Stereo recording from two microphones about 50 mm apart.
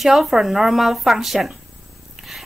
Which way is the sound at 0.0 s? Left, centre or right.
Centre.